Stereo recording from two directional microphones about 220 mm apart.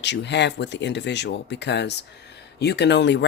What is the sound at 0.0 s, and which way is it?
Speech, 50° left (ahead or behind).